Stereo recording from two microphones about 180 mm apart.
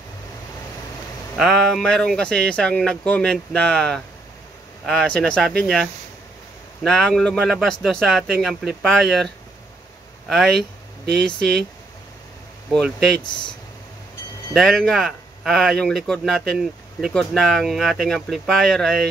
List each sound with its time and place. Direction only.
1.3 s speech: centre (ahead or behind)
12.7 s speech: 5° left (ahead or behind)
14.5 s speech: centre (ahead or behind)